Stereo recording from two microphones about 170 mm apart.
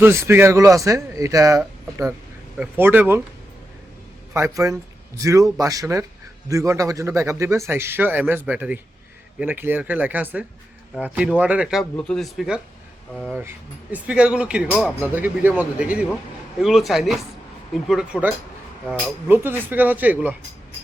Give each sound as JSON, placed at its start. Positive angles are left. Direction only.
{"t": 0.0, "sound": "speech", "side_deg": -15}
{"t": 4.4, "sound": "a man's voice", "side_deg": -20}
{"t": 13.9, "sound": "speech", "side_deg": -5}